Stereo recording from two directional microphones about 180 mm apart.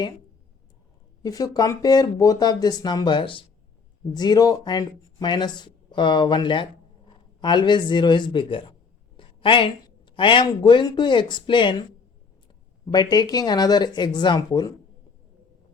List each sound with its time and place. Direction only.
1.2 s speech: 20° left (ahead or behind)